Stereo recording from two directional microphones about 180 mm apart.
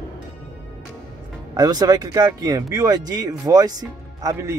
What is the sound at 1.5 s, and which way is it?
Speech, 20° right (ahead or behind).